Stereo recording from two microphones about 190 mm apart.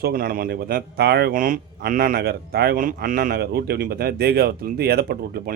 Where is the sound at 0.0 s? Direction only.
50° right (ahead or behind).